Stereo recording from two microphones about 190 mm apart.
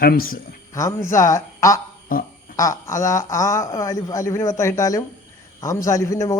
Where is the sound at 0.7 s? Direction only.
15° left (ahead or behind).